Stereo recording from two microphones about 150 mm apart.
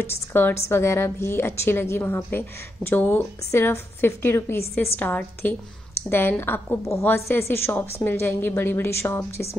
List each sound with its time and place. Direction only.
0.0 s a woman's voice: 15° left (ahead or behind)